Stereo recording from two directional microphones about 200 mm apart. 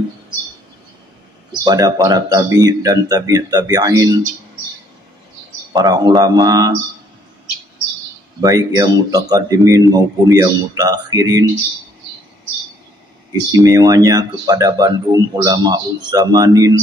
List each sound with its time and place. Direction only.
1.6 s speech: 20° right (ahead or behind)
5.7 s speech: 20° right (ahead or behind)
8.4 s speech: 20° right (ahead or behind)
13.5 s speech: 15° right (ahead or behind)